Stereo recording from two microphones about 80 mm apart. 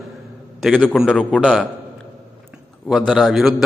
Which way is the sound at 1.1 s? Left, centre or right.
Centre.